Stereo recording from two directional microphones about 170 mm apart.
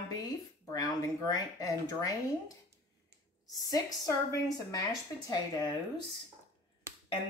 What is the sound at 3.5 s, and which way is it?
Speech, 20° left (ahead or behind).